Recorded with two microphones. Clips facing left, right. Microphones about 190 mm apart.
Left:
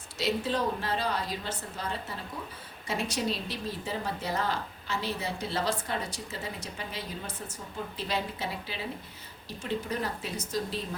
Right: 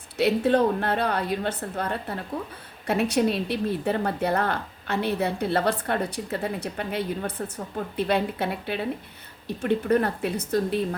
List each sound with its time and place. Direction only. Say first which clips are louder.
0.2 s a woman's voice: right 9 dB; 60° right (ahead or behind)